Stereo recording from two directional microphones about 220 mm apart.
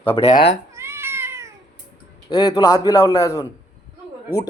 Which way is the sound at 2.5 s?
15° left (ahead or behind).